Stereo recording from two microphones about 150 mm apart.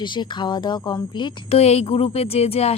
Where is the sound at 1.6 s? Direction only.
45° left (ahead or behind).